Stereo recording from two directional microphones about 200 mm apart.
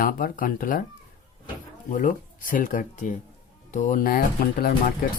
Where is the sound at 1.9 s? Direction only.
40° left (ahead or behind).